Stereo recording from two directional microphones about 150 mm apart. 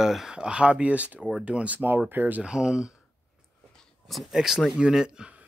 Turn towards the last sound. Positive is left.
turn(degrees=-5)  # may be behind; listen again after turning